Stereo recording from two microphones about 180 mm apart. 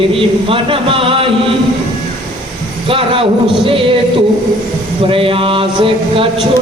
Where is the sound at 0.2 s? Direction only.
30° right (ahead or behind).